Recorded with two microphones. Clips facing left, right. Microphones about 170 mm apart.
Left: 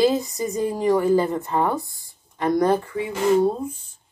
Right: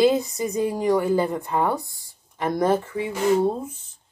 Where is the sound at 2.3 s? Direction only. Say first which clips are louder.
Left 2 dB; 20° right (ahead or behind).